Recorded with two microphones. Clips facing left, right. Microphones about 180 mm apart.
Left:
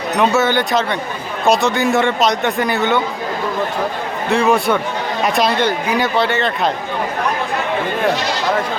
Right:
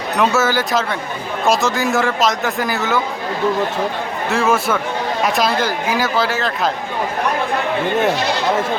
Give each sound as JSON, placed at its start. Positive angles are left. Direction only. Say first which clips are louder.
{"t": 0.2, "sound": "a man's voice", "louder": "left 1 dB", "side_deg": 0}
{"t": 4.3, "sound": "a man's voice", "louder": "left 3 dB", "side_deg": 0}